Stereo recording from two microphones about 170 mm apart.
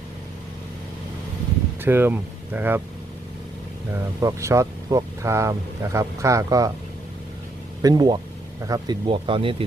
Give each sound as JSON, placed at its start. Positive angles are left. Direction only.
{"t": 1.8, "sound": "speech", "side_deg": -15}
{"t": 4.2, "sound": "speech", "side_deg": -20}
{"t": 7.8, "sound": "speech", "side_deg": -20}